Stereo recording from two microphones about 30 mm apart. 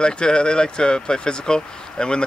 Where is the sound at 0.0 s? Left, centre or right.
Left.